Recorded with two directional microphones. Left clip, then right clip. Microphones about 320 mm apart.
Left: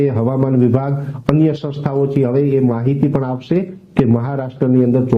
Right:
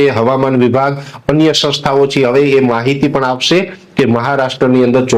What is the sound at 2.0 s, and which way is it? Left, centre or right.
A man's voice, centre.